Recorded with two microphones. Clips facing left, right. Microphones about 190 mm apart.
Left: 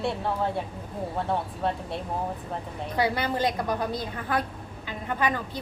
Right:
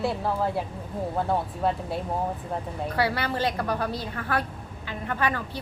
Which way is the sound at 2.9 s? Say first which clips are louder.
Left 1 dB; 15° left (ahead or behind).